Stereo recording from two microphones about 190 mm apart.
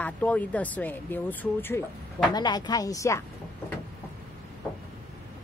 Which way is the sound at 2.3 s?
20° left (ahead or behind).